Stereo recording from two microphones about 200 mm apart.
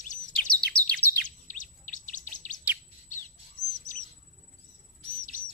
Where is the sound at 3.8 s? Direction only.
40° left (ahead or behind).